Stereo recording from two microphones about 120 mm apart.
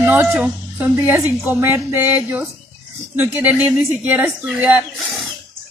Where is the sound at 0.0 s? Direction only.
15° right (ahead or behind).